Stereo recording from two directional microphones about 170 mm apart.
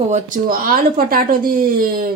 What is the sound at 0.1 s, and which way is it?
Speech, 55° right (ahead or behind).